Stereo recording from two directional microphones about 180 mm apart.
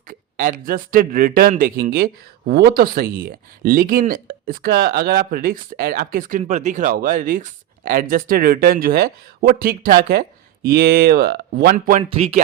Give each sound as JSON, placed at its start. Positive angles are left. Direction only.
{"t": 0.1, "sound": "a man's voice", "side_deg": -50}
{"t": 12.0, "sound": "speech", "side_deg": -35}